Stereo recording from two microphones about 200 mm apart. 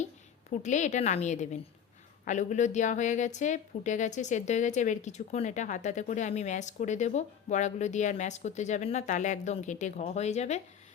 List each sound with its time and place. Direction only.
0.6 s a woman's voice: 35° left (ahead or behind)